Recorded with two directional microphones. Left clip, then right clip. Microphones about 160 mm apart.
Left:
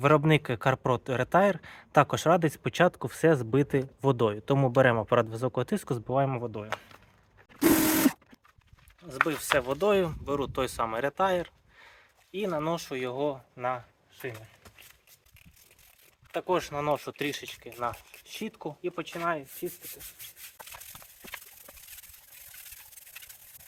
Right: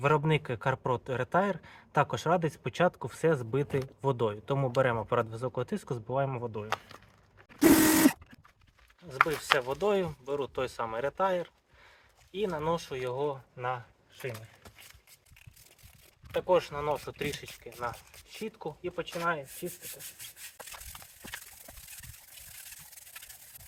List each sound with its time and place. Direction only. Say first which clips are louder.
0.0 s a man's voice: left 4 dB; 60° left (ahead or behind)
6.7 s speech: right 1 dB; 35° right (ahead or behind)
9.6 s speech: left 4 dB; 90° left
16.3 s speech: right 2 dB; 75° left (ahead or behind); by 19.4 s 90° left